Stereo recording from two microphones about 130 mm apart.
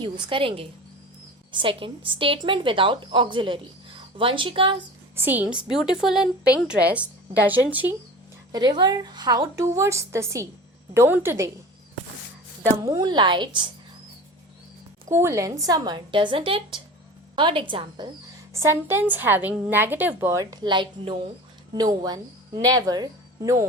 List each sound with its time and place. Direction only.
0.0 s a woman's voice: 40° right (ahead or behind)
5.4 s a woman's voice: 5° right (ahead or behind)
8.5 s a woman's voice: 35° right (ahead or behind)
12.8 s a woman's voice: 30° right (ahead or behind)
15.1 s a woman's voice: 20° right (ahead or behind); by 18.1 s 35° right (ahead or behind)
18.5 s a woman's voice: 20° right (ahead or behind)
20.1 s a woman's voice: 25° right (ahead or behind)